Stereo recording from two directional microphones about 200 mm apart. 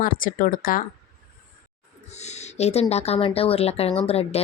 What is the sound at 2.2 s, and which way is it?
A woman's voice, 30° left (ahead or behind).